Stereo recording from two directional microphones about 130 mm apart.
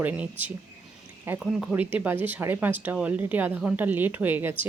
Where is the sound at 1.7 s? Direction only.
10° right (ahead or behind).